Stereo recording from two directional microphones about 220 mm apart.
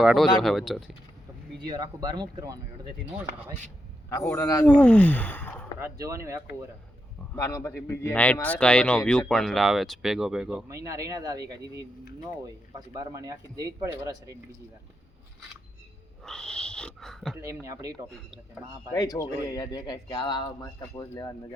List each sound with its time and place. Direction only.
0.0 s speech: centre (ahead or behind)
1.6 s speech: 15° right (ahead or behind)
4.2 s speech: 5° left (ahead or behind)
4.8 s a sound: 5° left (ahead or behind)
5.8 s speech: 15° right (ahead or behind)
7.3 s speech: 15° left (ahead or behind); by 11.7 s 15° right (ahead or behind)
12.7 s speech: 15° right (ahead or behind)
16.2 s wheeze: 5° left (ahead or behind)
17.3 s speech: 10° right (ahead or behind)
18.9 s speech: 15° left (ahead or behind)